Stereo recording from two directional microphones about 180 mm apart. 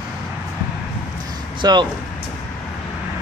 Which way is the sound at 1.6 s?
25° right (ahead or behind).